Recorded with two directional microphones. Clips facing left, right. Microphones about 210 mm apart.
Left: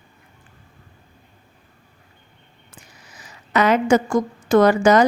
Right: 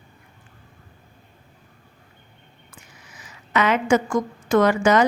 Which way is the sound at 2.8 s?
35° left (ahead or behind).